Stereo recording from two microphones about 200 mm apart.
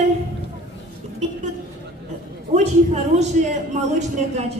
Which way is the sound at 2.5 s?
35° right (ahead or behind).